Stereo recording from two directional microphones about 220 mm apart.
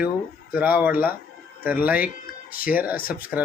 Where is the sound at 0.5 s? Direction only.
5° right (ahead or behind).